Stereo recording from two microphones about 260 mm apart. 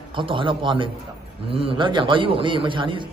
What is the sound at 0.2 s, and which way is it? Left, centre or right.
A man's voice, centre.